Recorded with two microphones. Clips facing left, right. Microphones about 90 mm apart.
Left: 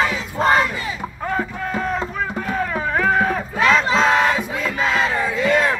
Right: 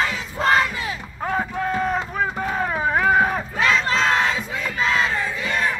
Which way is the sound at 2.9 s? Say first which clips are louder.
Even; 10° right (ahead or behind).